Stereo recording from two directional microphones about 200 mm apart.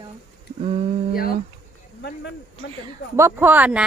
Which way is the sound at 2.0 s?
60° left (ahead or behind).